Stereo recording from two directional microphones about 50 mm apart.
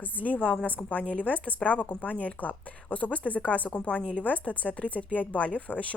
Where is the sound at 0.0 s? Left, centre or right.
Left.